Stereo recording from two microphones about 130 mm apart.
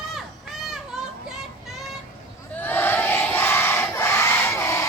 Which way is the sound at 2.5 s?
15° left (ahead or behind).